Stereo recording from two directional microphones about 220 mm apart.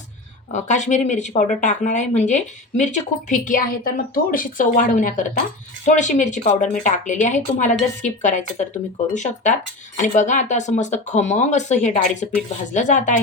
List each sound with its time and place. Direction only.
0.5 s speech: 30° left (ahead or behind)